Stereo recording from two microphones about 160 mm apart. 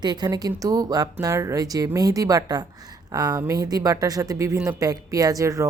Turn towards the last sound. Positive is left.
turn(degrees=-20)  # may be behind; listen again after turning